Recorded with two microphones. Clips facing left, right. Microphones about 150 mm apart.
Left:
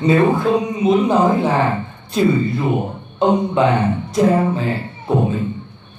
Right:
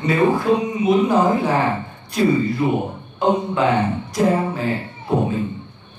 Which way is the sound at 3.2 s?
20° left (ahead or behind).